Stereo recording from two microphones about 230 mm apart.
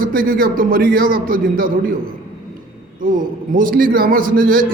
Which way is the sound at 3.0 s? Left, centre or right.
Right.